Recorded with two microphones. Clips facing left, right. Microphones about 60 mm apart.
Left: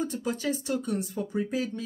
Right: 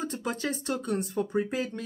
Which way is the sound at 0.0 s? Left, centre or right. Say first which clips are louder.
Left 2 dB; right.